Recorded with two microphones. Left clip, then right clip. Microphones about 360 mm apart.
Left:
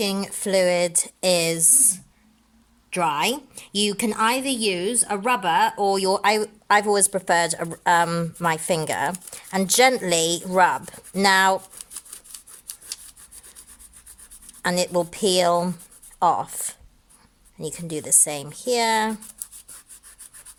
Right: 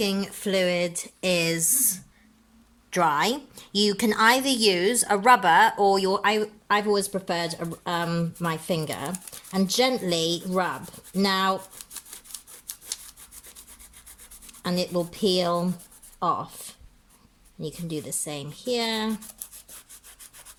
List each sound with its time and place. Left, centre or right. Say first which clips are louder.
0.0 s a woman's voice: left 2 dB; centre
11.8 s a sound: left 1 dB; centre
14.6 s a woman's voice: left 5 dB; centre